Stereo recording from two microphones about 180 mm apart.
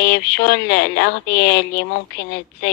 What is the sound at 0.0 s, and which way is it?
Speech, 70° left (ahead or behind).